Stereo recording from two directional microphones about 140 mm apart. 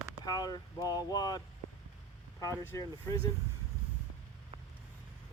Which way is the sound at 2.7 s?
25° left (ahead or behind).